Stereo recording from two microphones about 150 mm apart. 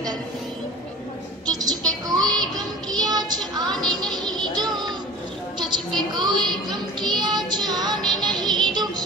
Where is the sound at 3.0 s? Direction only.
25° right (ahead or behind).